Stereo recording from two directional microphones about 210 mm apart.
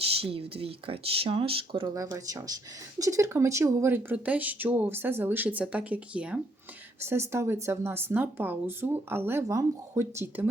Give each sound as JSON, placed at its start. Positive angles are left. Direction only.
{"t": 0.2, "sound": "speech", "side_deg": -25}